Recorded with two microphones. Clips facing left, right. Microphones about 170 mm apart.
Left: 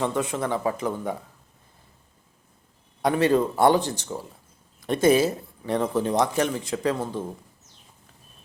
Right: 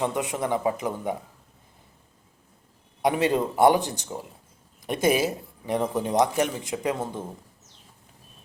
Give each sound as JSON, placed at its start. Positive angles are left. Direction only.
{"t": 0.0, "sound": "speech", "side_deg": -15}
{"t": 3.0, "sound": "speech", "side_deg": -15}